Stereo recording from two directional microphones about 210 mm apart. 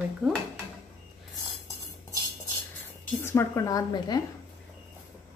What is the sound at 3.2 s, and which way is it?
A woman's voice, 10° left (ahead or behind).